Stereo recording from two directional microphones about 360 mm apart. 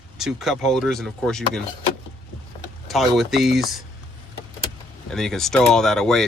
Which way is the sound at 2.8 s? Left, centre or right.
Centre.